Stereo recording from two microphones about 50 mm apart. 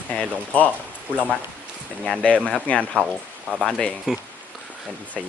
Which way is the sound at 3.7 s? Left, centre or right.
Centre.